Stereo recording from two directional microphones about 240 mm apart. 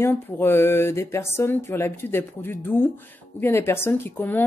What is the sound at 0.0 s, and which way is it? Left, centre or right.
A woman's voice, centre.